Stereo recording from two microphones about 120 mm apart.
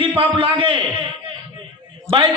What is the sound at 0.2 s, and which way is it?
Speech, 45° right (ahead or behind).